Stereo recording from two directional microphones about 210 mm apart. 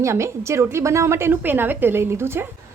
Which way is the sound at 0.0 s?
15° right (ahead or behind).